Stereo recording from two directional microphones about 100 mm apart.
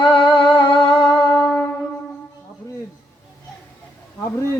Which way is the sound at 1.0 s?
5° left (ahead or behind).